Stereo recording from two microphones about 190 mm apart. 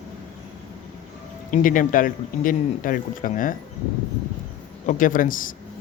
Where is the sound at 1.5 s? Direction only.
45° left (ahead or behind).